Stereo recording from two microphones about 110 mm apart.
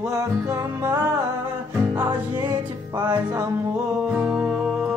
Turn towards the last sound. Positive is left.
turn(degrees=-15)  # may be behind; listen again after turning